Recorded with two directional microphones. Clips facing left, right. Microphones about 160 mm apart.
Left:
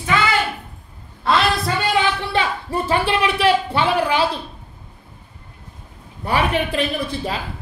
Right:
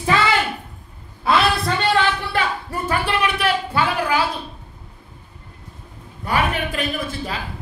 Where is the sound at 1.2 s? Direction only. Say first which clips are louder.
Even; 5° right (ahead or behind).